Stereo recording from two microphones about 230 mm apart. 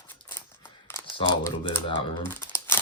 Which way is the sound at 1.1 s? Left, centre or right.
Centre.